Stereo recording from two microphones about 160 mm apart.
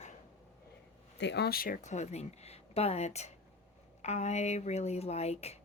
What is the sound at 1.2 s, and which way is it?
Speech, 90° left.